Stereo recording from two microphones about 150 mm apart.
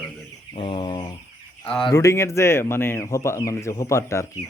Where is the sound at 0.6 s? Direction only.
35° left (ahead or behind).